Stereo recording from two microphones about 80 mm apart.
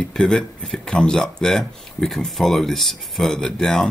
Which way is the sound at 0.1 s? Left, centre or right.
Centre.